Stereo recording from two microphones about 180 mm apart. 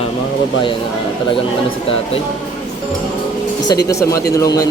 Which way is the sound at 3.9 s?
15° left (ahead or behind).